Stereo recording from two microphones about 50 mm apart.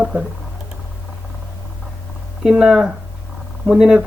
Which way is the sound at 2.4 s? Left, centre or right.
Centre.